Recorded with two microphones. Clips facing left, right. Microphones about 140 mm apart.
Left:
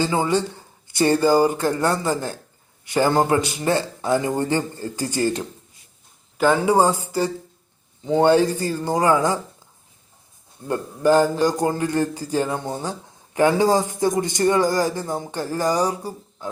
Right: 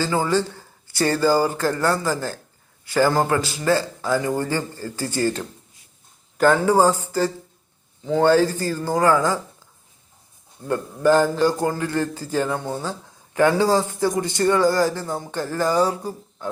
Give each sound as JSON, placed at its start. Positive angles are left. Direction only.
{"t": 0.0, "sound": "speech", "side_deg": 20}
{"t": 6.3, "sound": "a man's voice", "side_deg": 5}
{"t": 10.7, "sound": "a man's voice", "side_deg": 15}